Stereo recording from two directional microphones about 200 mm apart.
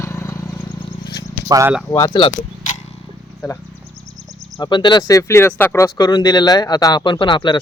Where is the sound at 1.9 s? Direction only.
20° left (ahead or behind).